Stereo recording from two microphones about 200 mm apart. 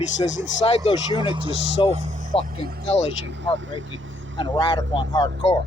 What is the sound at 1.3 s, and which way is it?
Speech, 25° right (ahead or behind).